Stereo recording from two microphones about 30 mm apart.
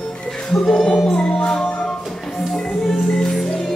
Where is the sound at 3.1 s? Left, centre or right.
Centre.